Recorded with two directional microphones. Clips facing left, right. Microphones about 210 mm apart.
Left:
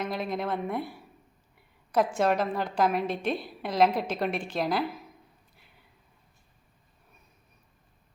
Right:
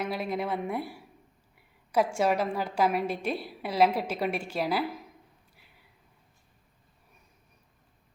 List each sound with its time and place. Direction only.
0.0 s a woman's voice: 10° right (ahead or behind)